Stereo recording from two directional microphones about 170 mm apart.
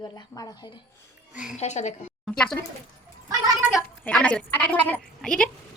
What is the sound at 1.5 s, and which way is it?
Speech, 45° left (ahead or behind).